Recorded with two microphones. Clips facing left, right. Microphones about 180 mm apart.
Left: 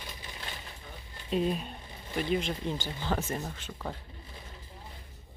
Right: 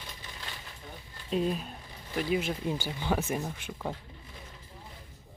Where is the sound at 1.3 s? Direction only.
Centre (ahead or behind).